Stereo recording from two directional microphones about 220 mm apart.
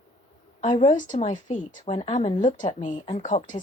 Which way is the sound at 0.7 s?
20° left (ahead or behind).